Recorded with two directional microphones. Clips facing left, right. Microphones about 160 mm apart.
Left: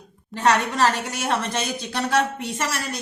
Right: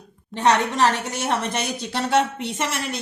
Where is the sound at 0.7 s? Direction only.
15° right (ahead or behind).